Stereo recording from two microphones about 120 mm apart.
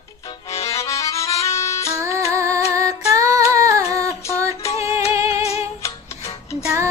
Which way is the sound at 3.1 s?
25° right (ahead or behind).